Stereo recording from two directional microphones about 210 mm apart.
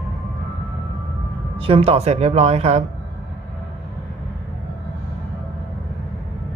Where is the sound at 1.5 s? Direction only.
25° right (ahead or behind).